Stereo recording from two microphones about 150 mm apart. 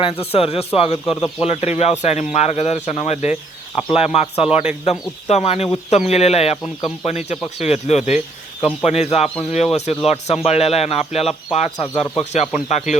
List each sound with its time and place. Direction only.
0.0 s speech: 40° left (ahead or behind)